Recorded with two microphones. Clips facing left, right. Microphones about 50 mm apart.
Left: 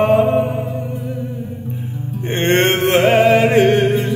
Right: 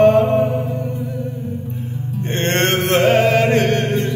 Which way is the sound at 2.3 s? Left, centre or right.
Centre.